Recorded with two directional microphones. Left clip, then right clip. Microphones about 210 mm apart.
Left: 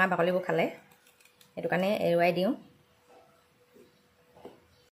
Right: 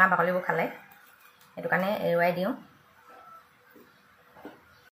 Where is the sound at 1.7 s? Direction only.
80° left.